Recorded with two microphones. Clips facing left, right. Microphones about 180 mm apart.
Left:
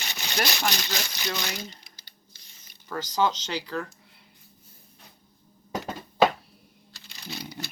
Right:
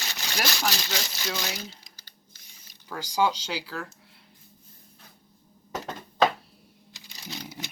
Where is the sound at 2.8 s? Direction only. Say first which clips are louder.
Even; 10° right (ahead or behind).